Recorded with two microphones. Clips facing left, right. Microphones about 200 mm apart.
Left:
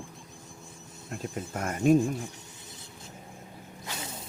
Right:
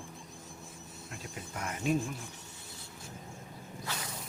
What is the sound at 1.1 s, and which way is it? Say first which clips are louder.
Speech: left 9 dB; 50° left (ahead or behind).